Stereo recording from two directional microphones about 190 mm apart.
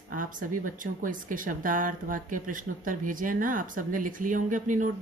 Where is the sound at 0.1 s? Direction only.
45° right (ahead or behind).